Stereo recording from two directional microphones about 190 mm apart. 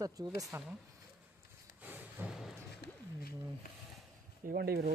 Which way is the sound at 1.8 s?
5° right (ahead or behind).